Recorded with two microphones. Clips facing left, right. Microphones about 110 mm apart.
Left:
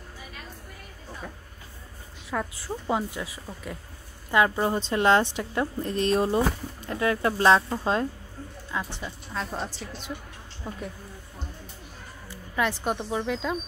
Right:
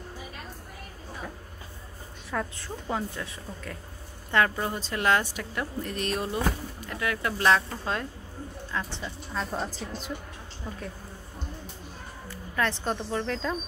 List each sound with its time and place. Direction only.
2.3 s a woman's voice: 15° left (ahead or behind)
8.7 s a woman's voice: 15° left (ahead or behind)
9.3 s a woman's voice: centre (ahead or behind)
10.6 s a woman's voice: 20° left (ahead or behind)
12.5 s a woman's voice: 5° left (ahead or behind)